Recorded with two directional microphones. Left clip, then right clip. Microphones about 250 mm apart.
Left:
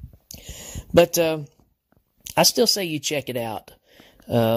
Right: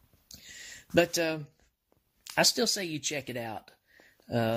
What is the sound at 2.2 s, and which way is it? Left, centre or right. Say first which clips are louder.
Speech: left 8 dB; left.